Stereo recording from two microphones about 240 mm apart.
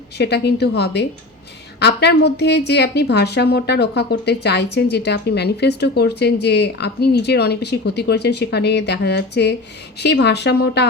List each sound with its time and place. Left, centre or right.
0.2 s a woman's voice: left